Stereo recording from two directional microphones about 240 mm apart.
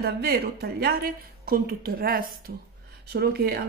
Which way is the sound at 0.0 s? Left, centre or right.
Right.